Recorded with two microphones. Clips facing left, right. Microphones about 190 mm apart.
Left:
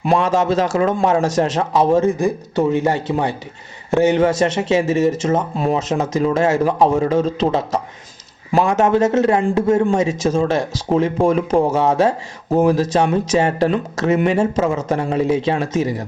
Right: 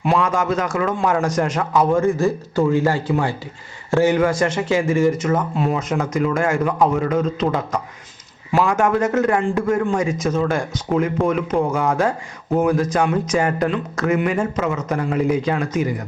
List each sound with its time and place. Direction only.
0.0 s speech: 35° left (ahead or behind)
0.3 s speech: 25° left (ahead or behind)